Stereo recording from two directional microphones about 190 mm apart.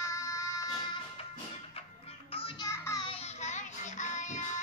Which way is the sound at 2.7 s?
15° left (ahead or behind).